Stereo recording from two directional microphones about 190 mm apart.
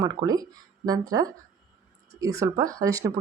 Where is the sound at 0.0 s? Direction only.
20° right (ahead or behind).